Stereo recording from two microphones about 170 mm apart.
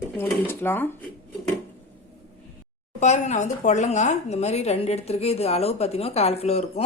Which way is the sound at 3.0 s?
45° left (ahead or behind).